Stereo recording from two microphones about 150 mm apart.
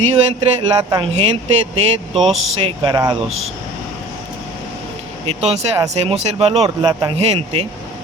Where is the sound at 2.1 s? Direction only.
Centre (ahead or behind).